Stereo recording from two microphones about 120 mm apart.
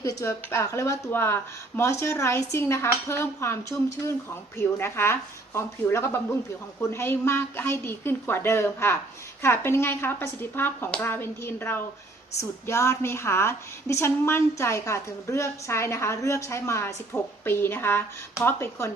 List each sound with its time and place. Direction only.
0.0 s a woman's voice: 25° left (ahead or behind)